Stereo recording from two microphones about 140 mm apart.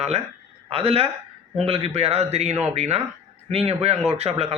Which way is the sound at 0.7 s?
40° right (ahead or behind).